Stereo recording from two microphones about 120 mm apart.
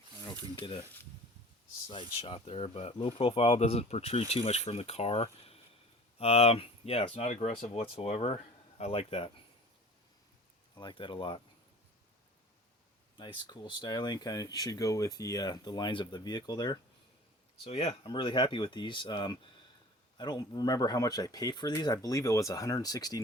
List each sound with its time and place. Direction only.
1.9 s speech: 45° left (ahead or behind)
10.8 s speech: 40° left (ahead or behind)
13.1 s speech: 40° left (ahead or behind)
17.6 s speech: 55° left (ahead or behind)
18.0 s speech: 40° left (ahead or behind)